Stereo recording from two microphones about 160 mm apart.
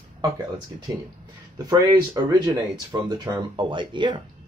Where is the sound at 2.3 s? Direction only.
25° right (ahead or behind).